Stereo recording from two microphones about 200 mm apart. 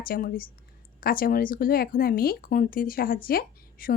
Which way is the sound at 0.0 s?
45° left (ahead or behind).